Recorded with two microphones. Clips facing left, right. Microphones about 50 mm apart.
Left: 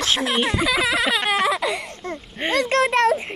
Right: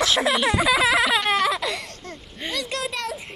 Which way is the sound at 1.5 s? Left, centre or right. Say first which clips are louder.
Left 3 dB; centre.